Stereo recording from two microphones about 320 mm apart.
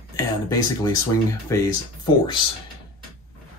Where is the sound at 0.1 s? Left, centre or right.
Centre.